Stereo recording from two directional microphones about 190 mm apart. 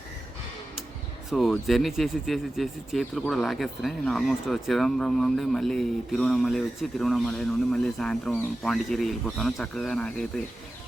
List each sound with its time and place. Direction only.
1.3 s speech: centre (ahead or behind)